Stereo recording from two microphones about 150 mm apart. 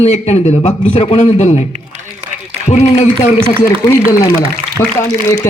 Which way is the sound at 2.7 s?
45° left (ahead or behind).